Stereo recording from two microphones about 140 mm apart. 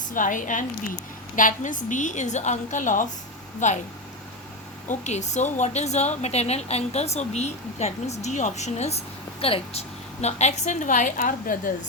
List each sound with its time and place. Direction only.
0.1 s a woman's voice: 70° left (ahead or behind)
4.9 s a woman's voice: 55° left (ahead or behind); by 11.7 s 75° left (ahead or behind)